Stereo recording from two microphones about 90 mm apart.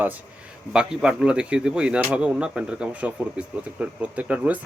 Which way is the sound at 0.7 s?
10° right (ahead or behind).